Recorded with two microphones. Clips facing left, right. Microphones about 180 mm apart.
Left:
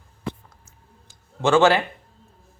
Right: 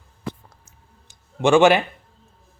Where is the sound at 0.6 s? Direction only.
15° right (ahead or behind).